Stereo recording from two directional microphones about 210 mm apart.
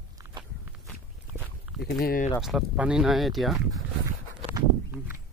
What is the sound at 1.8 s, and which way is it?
Speech, 50° left (ahead or behind).